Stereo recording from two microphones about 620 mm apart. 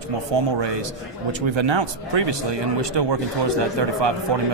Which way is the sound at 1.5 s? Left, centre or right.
Right.